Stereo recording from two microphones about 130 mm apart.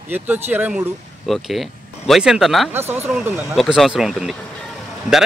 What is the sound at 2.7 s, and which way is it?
Speech, 15° right (ahead or behind).